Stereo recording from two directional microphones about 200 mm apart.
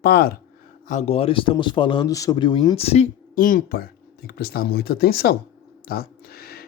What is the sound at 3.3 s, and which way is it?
Speech, 45° left (ahead or behind).